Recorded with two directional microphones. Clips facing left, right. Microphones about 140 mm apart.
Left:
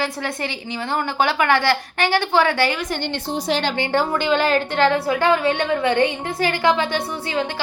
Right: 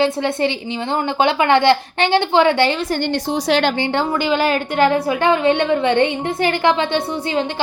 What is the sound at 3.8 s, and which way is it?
Speech, 25° right (ahead or behind).